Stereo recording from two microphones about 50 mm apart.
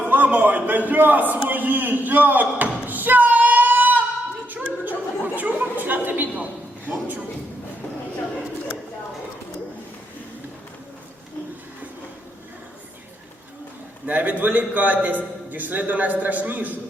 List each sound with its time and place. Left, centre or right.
0.1 s a man's voice: right
1.5 s a sound: right
4.9 s chuckle: right
14.1 s a man's voice: right